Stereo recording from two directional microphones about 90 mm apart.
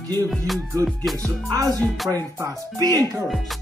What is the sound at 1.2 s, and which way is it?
Speech, 35° right (ahead or behind).